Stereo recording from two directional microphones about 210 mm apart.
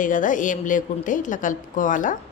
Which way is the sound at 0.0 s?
40° left (ahead or behind).